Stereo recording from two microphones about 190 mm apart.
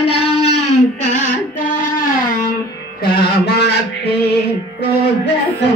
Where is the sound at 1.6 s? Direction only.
45° left (ahead or behind).